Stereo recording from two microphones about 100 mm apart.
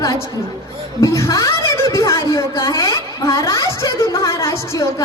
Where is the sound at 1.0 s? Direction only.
35° left (ahead or behind).